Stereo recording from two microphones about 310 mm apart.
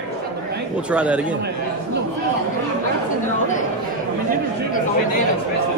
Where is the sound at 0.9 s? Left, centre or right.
Centre.